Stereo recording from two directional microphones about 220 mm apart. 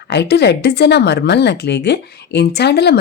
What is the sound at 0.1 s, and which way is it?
A woman's voice, 50° left (ahead or behind).